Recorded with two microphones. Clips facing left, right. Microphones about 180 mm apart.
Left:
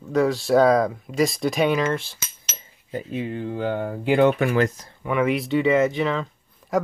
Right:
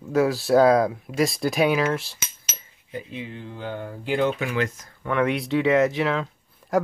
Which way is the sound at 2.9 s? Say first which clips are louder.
Left 6 dB; 45° left (ahead or behind).